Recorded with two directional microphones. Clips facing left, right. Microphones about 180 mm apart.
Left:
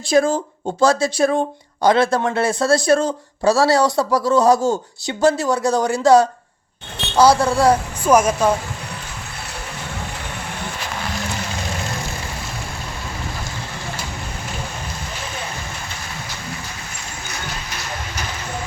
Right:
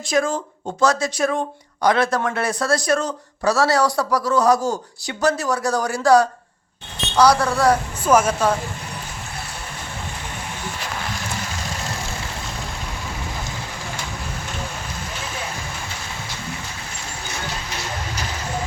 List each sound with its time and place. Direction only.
0.1 s speech: 35° left (ahead or behind)
8.0 s speech: 10° left (ahead or behind)